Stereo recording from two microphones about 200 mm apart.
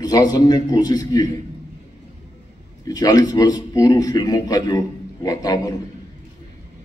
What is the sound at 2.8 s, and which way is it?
A man's voice, 20° left (ahead or behind).